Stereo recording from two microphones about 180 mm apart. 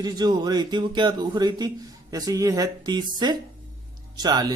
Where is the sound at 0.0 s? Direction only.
20° right (ahead or behind).